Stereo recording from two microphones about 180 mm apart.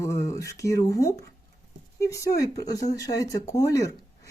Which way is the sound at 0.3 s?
15° left (ahead or behind).